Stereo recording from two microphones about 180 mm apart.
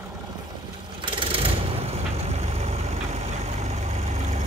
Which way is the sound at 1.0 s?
30° right (ahead or behind).